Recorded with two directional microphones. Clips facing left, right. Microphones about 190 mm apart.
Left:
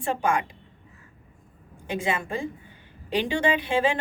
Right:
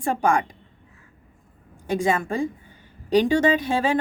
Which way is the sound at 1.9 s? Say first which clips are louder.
Right 5 dB; 45° right (ahead or behind).